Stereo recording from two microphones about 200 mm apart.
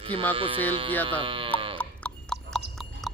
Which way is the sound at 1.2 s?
25° right (ahead or behind).